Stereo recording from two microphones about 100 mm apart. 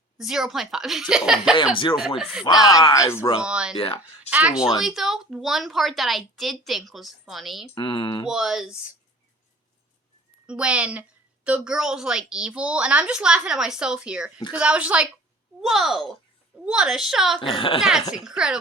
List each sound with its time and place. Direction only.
0.2 s a woman's voice: 5° right (ahead or behind)
2.5 s speech: 40° left (ahead or behind)
2.9 s speech: 30° left (ahead or behind)
3.4 s a woman's voice: 10° right (ahead or behind)
3.8 s speech: 70° left (ahead or behind)
4.3 s a woman's voice: 15° right (ahead or behind)
7.8 s speech: 55° left (ahead or behind)
8.3 s a woman's voice: 5° right (ahead or behind)
10.4 s a woman's voice: 10° right (ahead or behind)
15.6 s a woman's voice: centre (ahead or behind)
17.5 s speech: 60° left (ahead or behind)
17.7 s a woman's voice: 5° right (ahead or behind)